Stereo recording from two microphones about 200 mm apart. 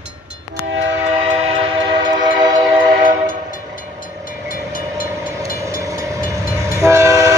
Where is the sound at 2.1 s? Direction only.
20° right (ahead or behind).